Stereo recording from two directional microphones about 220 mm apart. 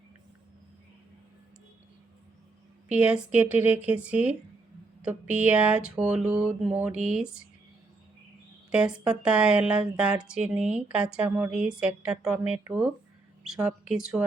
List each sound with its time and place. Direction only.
2.9 s speech: 5° right (ahead or behind)
8.7 s speech: 5° right (ahead or behind)